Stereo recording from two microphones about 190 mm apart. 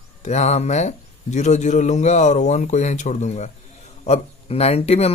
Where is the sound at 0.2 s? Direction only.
35° left (ahead or behind).